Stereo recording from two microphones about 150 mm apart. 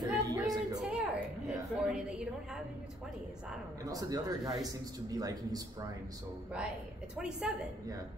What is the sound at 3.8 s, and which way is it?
Speech, 25° right (ahead or behind).